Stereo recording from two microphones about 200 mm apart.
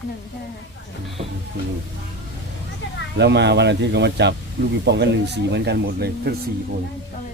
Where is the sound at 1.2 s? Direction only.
30° right (ahead or behind).